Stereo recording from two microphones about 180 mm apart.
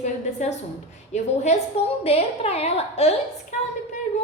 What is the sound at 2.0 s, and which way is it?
A woman's voice, 35° left (ahead or behind).